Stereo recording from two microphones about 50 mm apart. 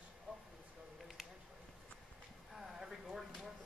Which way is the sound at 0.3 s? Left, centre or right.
Right.